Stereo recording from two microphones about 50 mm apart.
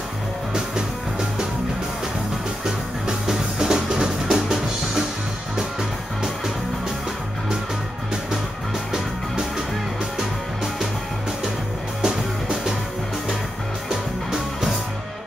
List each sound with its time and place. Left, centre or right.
2.6 s music: centre
10.1 s music: centre
12.0 s music: centre